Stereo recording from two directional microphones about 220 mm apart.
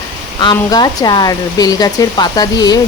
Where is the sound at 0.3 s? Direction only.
20° left (ahead or behind).